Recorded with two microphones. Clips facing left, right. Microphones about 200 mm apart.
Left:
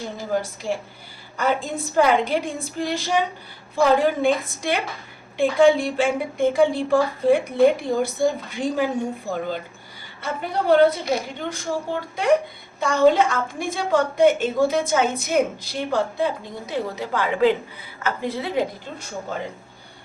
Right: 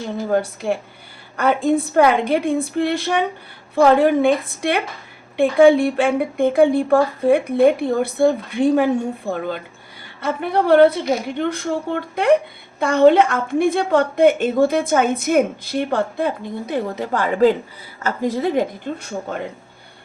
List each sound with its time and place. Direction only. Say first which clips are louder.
0.6 s a woman's voice: right 4 dB; 60° right (ahead or behind)